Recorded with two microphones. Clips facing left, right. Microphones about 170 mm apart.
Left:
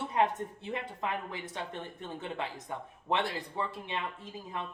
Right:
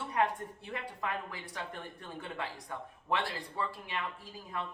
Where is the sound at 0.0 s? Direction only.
20° left (ahead or behind).